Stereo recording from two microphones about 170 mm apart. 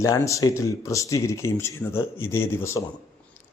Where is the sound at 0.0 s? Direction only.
20° left (ahead or behind).